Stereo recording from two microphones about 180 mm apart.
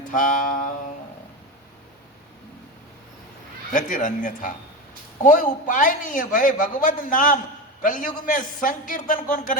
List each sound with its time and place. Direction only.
0.1 s a man's voice: 45° left (ahead or behind)
3.7 s a man's voice: 45° left (ahead or behind)